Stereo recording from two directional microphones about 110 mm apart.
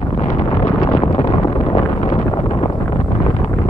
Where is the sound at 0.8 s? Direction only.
40° left (ahead or behind).